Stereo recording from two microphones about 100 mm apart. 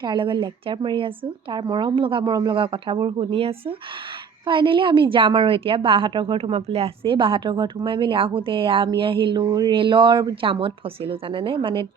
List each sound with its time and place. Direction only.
0.0 s a woman's voice: 55° right (ahead or behind)